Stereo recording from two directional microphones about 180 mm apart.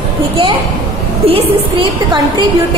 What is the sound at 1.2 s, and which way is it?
Speech, 30° right (ahead or behind).